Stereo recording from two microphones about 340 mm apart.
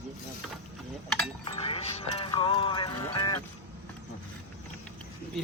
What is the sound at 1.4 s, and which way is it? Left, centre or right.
Music, centre.